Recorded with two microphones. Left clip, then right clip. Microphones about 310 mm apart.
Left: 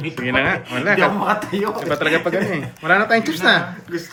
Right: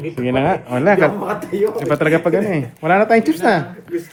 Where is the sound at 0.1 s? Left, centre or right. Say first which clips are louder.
Right 1 dB; centre.